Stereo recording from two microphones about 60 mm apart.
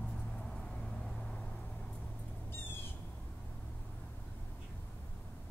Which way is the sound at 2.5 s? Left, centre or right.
Left.